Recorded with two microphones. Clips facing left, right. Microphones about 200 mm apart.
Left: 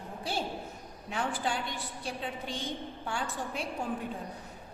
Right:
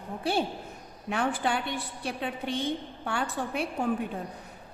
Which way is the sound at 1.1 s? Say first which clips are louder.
Right 5 dB; 60° right (ahead or behind).